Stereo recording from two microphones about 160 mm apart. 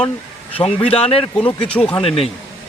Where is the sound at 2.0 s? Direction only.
35° left (ahead or behind).